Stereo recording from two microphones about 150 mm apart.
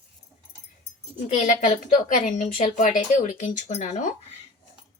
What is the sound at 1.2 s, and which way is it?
Speech, 55° left (ahead or behind).